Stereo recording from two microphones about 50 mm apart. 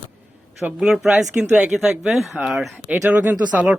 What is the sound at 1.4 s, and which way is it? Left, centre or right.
Speech, right.